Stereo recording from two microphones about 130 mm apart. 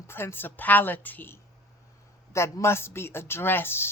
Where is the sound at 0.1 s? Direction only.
15° left (ahead or behind).